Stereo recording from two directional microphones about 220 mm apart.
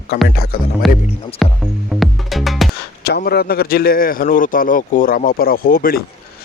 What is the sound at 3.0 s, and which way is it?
Speech, 45° left (ahead or behind).